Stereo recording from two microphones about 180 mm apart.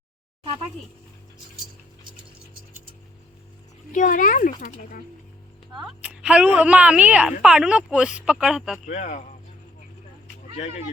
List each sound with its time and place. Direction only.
3.9 s speech: 45° left (ahead or behind)
6.0 s speech: 5° right (ahead or behind)
8.9 s speech: 40° left (ahead or behind)